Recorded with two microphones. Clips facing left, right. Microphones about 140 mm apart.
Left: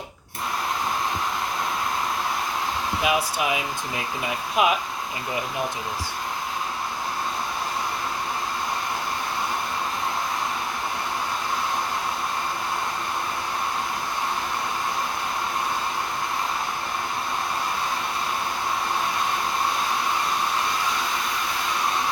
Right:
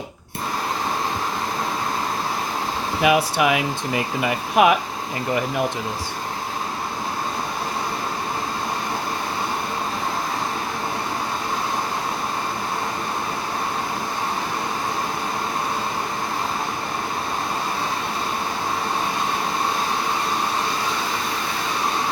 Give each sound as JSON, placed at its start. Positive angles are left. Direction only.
{"t": 3.0, "sound": "speech", "side_deg": -65}